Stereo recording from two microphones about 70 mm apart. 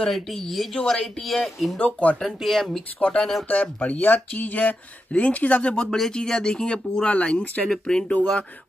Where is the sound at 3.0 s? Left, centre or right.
Centre.